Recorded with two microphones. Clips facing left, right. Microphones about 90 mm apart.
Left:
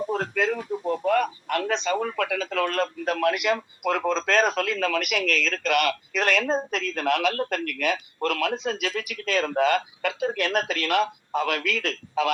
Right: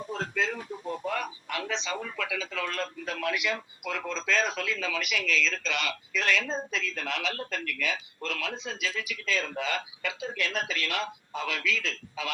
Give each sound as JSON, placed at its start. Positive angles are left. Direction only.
{"t": 0.1, "sound": "a man's voice", "side_deg": 55}